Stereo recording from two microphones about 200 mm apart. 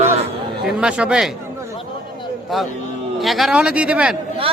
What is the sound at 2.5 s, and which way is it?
Speech, centre (ahead or behind).